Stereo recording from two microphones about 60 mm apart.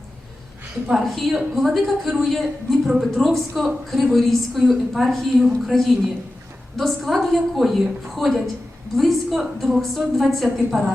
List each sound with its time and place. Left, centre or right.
0.9 s a woman's voice: centre